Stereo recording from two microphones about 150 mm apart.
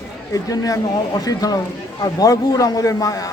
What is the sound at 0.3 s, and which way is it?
Speech, 25° left (ahead or behind).